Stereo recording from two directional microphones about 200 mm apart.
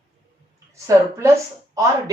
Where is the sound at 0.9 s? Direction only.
15° right (ahead or behind).